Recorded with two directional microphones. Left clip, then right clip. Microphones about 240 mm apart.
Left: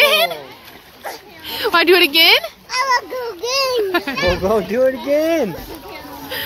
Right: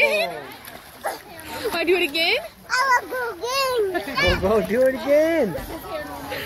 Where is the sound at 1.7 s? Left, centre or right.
Left.